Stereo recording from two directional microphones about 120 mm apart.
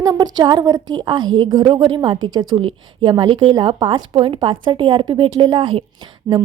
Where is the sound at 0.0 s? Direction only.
30° right (ahead or behind).